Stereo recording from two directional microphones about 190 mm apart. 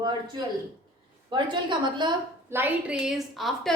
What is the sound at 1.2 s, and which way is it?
Speech, 25° right (ahead or behind).